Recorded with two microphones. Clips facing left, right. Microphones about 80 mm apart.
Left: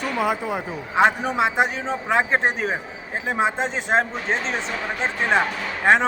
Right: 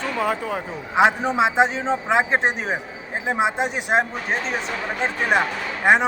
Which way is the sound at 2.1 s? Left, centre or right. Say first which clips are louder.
Left 1 dB; centre.